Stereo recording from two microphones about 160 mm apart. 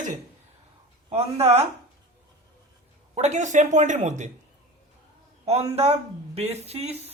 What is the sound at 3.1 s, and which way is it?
Speech, 45° right (ahead or behind).